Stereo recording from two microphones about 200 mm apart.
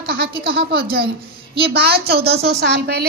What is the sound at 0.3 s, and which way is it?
Speech, 25° right (ahead or behind).